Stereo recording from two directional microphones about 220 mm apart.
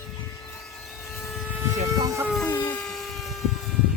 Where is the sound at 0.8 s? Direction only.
5° right (ahead or behind).